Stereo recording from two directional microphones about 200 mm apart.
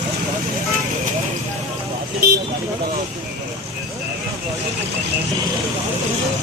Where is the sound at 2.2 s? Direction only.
50° right (ahead or behind).